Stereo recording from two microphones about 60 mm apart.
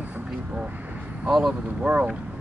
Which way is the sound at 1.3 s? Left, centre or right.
Centre.